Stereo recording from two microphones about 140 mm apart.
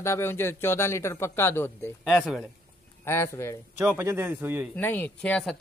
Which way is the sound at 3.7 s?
15° right (ahead or behind).